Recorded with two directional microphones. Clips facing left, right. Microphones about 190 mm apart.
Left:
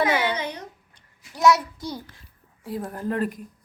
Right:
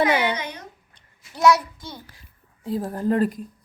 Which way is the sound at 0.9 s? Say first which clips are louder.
Right 2 dB; 20° left (ahead or behind).